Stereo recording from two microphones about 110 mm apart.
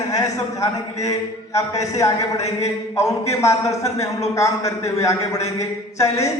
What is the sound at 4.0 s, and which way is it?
Speech, 30° left (ahead or behind).